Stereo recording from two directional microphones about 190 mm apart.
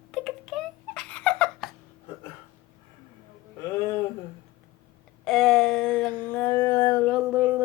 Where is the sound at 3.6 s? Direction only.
15° left (ahead or behind).